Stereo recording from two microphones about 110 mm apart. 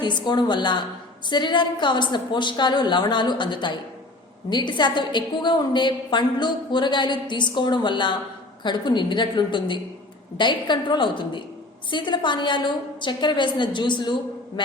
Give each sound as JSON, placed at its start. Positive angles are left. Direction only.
{"t": 0.0, "sound": "a woman's voice", "side_deg": 45}